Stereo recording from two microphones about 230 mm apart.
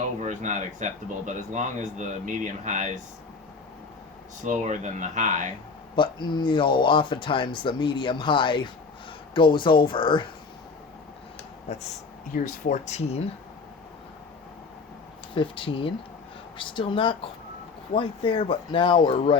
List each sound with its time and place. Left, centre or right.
0.2 s speech: right
4.4 s speech: right
6.0 s speech: centre
11.7 s speech: left
15.4 s speech: left